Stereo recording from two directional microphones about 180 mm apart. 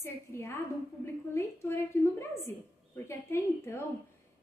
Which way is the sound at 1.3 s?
15° left (ahead or behind).